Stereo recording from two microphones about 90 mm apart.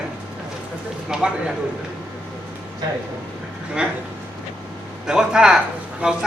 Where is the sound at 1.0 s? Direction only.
10° right (ahead or behind).